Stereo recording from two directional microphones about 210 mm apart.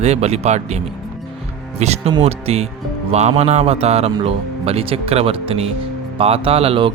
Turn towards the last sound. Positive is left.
turn(degrees=-25)  # may be behind; listen again after turning